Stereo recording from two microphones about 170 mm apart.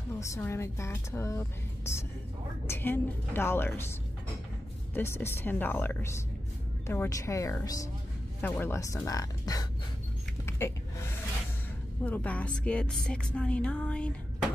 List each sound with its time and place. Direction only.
0.2 s a woman's voice: 15° left (ahead or behind)
4.9 s a woman's voice: 15° left (ahead or behind)
10.4 s a sound: 15° left (ahead or behind)
12.0 s a woman's voice: 10° left (ahead or behind)